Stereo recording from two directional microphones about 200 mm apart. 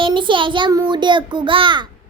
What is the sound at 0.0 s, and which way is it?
A child's voice, 25° right (ahead or behind).